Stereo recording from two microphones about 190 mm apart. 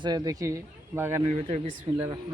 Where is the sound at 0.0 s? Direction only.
20° right (ahead or behind).